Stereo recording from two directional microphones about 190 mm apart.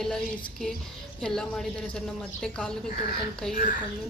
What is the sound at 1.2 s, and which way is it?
A woman's voice, 5° left (ahead or behind).